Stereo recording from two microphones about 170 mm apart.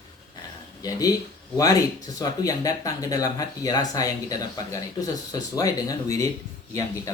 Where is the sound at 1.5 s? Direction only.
20° left (ahead or behind).